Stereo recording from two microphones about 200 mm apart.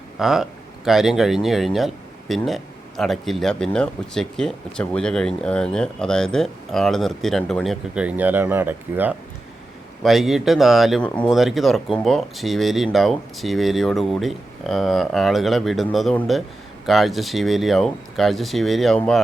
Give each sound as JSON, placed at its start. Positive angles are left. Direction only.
{"t": 0.2, "sound": "speech", "side_deg": -5}